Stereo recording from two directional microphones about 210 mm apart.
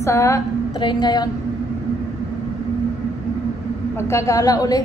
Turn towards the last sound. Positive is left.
turn(degrees=15)  # may be behind; listen again after turning